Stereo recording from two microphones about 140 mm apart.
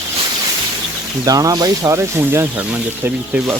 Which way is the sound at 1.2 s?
25° right (ahead or behind).